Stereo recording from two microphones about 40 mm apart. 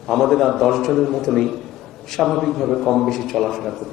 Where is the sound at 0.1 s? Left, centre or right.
Centre.